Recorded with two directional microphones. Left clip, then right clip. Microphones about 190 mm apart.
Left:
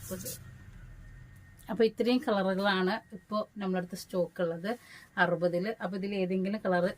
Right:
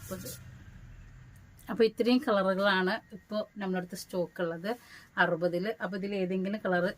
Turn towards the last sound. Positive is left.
turn(degrees=-20)  # may be behind; listen again after turning